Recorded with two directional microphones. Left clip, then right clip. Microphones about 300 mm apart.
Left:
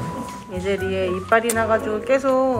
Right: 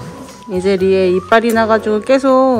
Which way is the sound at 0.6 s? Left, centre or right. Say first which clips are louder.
Right 10 dB; right.